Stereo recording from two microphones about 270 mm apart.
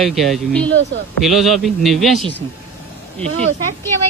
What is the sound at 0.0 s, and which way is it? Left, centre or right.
A man's voice, centre.